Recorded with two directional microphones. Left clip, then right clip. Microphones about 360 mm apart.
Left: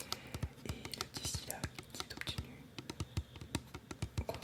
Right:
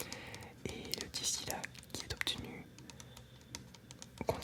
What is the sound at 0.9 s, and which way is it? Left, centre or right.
Whispering, right.